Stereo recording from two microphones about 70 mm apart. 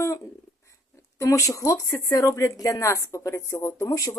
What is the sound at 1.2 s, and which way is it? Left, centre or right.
Speech, left.